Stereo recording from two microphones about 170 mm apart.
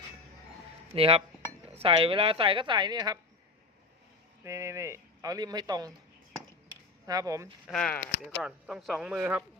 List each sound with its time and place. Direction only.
0.9 s speech: 35° right (ahead or behind)
4.4 s speech: 15° right (ahead or behind)
7.1 s speech: 20° right (ahead or behind)
7.7 s speech: 5° left (ahead or behind)